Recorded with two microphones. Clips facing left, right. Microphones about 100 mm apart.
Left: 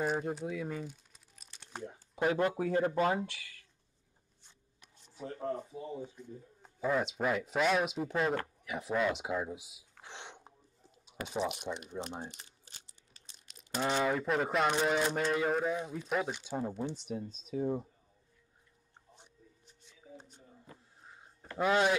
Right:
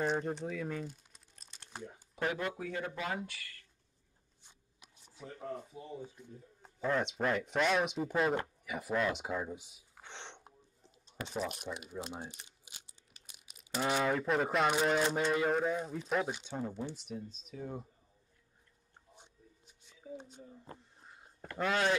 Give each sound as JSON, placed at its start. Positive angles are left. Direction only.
{"t": 0.0, "sound": "crumpling", "side_deg": 5}
{"t": 1.9, "sound": "a sound", "side_deg": 15}
{"t": 2.3, "sound": "speech", "side_deg": 40}
{"t": 5.2, "sound": "speech", "side_deg": 40}
{"t": 6.0, "sound": "speech", "side_deg": 0}
{"t": 10.0, "sound": "a sound", "side_deg": 5}
{"t": 11.3, "sound": "speech", "side_deg": 0}
{"t": 16.4, "sound": "speech", "side_deg": 15}
{"t": 19.1, "sound": "a sound", "side_deg": -15}
{"t": 21.5, "sound": "speech", "side_deg": 15}